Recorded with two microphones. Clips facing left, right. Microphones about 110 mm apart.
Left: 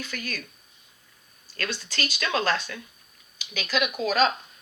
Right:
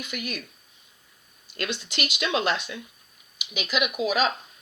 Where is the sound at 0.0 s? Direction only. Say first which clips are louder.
Right 1 dB; 20° right (ahead or behind).